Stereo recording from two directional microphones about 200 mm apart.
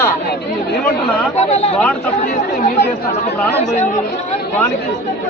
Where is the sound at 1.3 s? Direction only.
30° left (ahead or behind).